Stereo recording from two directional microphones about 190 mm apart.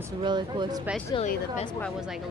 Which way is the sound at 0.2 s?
25° right (ahead or behind).